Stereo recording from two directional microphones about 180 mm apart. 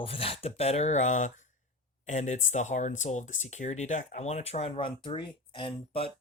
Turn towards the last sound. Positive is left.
turn(degrees=30)  # may be behind; listen again after turning